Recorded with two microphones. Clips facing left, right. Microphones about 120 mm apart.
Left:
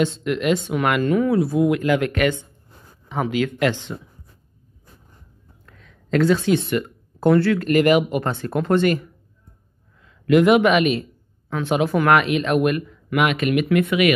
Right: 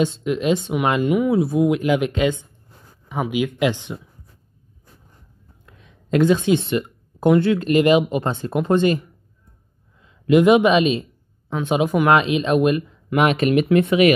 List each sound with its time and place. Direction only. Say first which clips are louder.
0.0 s speech: right 1 dB; 15° right (ahead or behind)
5.7 s speech: right 1 dB; 15° right (ahead or behind)
10.0 s a man's voice: right 1 dB; 20° right (ahead or behind)